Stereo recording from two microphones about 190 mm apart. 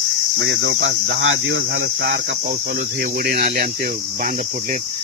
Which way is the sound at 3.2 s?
55° right (ahead or behind).